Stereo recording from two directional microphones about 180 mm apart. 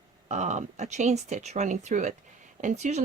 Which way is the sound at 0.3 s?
40° right (ahead or behind).